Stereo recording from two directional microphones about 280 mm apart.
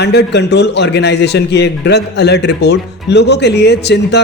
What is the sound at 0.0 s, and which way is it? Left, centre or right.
A man's voice, left.